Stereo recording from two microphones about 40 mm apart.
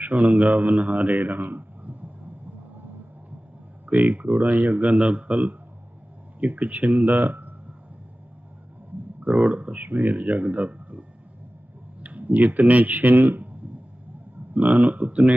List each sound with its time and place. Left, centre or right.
0.0 s speech: right
3.8 s speech: right
9.2 s speech: right
9.7 s speech: right
12.0 s tick-tock: right
12.5 s speech: right
14.5 s speech: right